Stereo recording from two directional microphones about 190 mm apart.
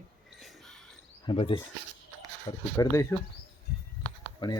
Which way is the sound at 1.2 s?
25° left (ahead or behind).